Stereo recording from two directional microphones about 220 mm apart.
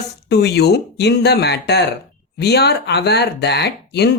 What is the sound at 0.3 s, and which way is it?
Speech, 50° left (ahead or behind).